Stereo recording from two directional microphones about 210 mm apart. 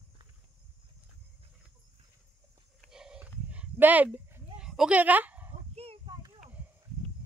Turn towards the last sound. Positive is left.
turn(degrees=-25)  # may be behind; listen again after turning